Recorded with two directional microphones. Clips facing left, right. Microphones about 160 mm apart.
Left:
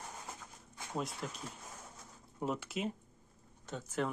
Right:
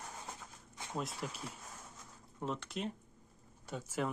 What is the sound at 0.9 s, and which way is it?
Speech, centre (ahead or behind).